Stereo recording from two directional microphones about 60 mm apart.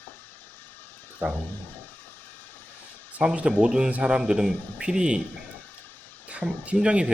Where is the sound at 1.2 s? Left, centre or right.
Right.